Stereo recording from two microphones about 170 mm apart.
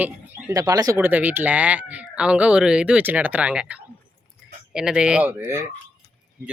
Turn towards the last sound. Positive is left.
turn(degrees=-5)  # may be behind; listen again after turning